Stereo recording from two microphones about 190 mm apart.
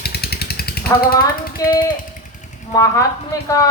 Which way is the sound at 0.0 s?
55° left (ahead or behind).